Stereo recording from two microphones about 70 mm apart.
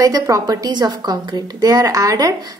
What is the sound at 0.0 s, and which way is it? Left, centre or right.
A woman's voice, right.